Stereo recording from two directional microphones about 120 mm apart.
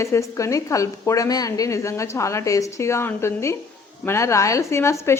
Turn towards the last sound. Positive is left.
turn(degrees=25)  # may be behind; listen again after turning